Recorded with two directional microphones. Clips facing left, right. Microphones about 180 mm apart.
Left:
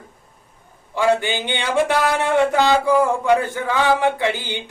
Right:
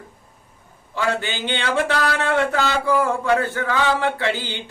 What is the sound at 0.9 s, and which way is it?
Speech, 15° left (ahead or behind).